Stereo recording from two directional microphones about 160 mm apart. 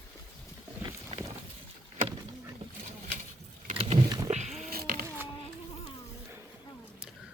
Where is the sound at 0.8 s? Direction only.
20° right (ahead or behind).